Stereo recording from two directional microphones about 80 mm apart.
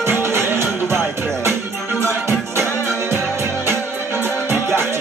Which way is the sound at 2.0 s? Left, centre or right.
Right.